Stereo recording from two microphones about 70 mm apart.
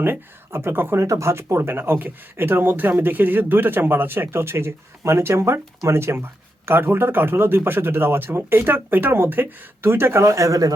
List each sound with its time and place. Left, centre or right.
0.0 s a man's voice: right
1.0 s a man's voice: right